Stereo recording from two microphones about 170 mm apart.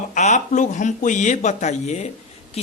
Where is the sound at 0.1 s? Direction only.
45° left (ahead or behind).